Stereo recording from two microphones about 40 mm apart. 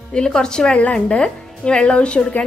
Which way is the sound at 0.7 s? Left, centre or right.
Left.